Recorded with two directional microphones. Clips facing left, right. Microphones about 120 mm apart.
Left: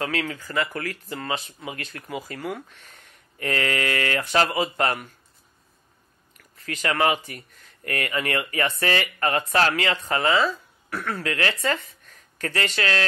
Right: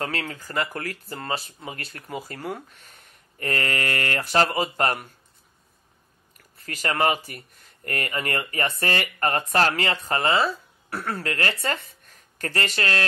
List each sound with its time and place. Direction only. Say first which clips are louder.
0.0 s speech: left 2 dB; 40° right (ahead or behind)
6.6 s speech: left 1 dB; 35° right (ahead or behind)